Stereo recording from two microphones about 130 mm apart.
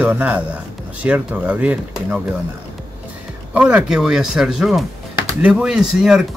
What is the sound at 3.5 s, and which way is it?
Speech, 10° right (ahead or behind).